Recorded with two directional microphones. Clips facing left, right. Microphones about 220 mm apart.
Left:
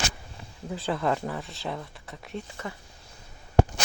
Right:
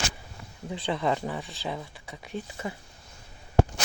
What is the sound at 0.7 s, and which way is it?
Speech, centre (ahead or behind).